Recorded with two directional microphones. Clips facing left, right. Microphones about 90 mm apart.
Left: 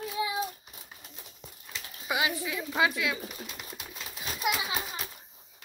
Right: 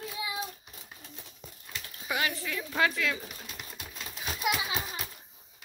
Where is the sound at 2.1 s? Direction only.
10° left (ahead or behind).